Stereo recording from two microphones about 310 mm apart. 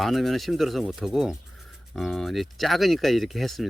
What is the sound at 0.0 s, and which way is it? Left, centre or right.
Speech, centre.